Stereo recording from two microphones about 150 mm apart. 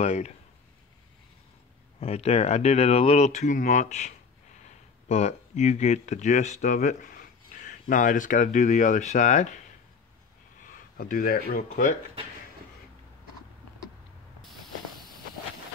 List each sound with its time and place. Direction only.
0.0 s speech: 50° left (ahead or behind)
2.0 s speech: 45° left (ahead or behind)
11.0 s speech: 65° left (ahead or behind)
14.4 s spray: centre (ahead or behind)